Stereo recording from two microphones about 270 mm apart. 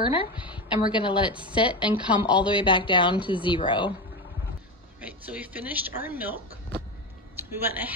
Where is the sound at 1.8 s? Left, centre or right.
Centre.